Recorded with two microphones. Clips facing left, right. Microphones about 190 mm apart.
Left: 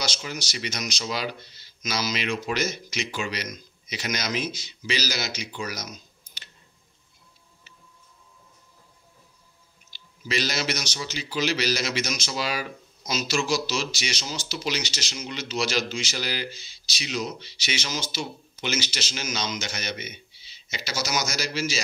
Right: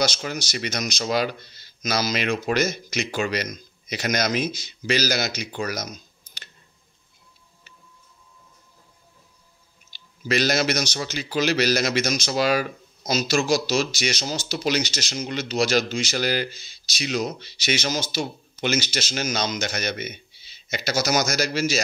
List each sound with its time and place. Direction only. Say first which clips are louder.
0.0 s speech: right 7 dB; 55° right (ahead or behind)
9.9 s speech: right 5 dB; 50° right (ahead or behind)